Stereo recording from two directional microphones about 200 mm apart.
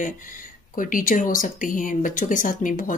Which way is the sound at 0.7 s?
45° left (ahead or behind).